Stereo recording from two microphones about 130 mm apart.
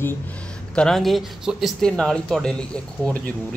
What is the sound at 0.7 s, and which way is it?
Speech, 5° left (ahead or behind).